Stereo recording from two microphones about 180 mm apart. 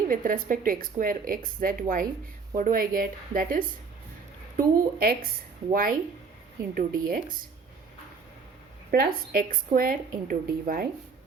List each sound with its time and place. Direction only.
0.1 s speech: 50° right (ahead or behind)
8.9 s speech: 55° right (ahead or behind)